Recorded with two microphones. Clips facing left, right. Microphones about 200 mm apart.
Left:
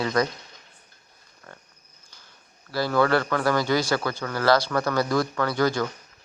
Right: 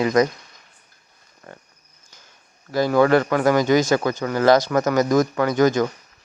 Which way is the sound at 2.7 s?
15° right (ahead or behind).